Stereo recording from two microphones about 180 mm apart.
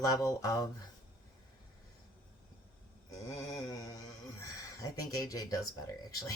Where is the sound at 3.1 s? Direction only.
20° left (ahead or behind).